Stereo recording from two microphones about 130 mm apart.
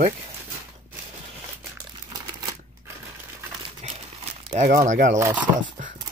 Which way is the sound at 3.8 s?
55° right (ahead or behind).